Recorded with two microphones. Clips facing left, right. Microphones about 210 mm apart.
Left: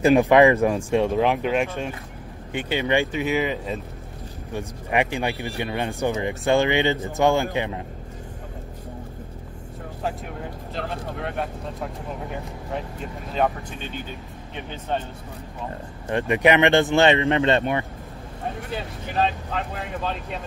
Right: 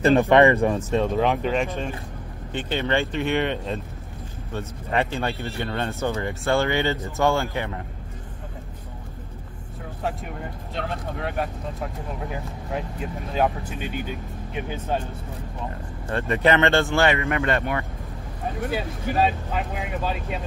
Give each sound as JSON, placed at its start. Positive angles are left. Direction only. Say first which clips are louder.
{"t": 0.0, "sound": "speech", "louder": "left 1 dB", "side_deg": 10}
{"t": 10.0, "sound": "speech", "louder": "even", "side_deg": 0}
{"t": 16.1, "sound": "speech", "louder": "left 2 dB", "side_deg": 15}
{"t": 18.7, "sound": "speech", "louder": "right 4 dB", "side_deg": -10}